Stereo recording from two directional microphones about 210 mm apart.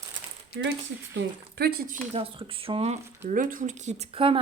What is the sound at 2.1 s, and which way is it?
Speech, 25° right (ahead or behind).